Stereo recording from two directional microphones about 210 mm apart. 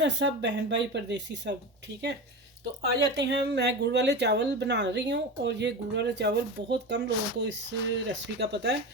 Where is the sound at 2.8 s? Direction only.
55° right (ahead or behind).